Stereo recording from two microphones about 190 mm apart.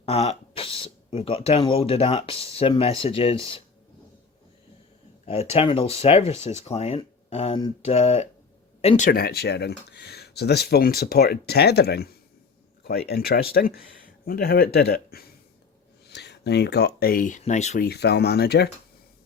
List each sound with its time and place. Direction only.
0.0 s speech: 35° left (ahead or behind)
5.2 s speech: 35° left (ahead or behind)
9.0 s speech: 55° left (ahead or behind); by 17.8 s 40° left (ahead or behind)
17.8 s speech: 60° left (ahead or behind)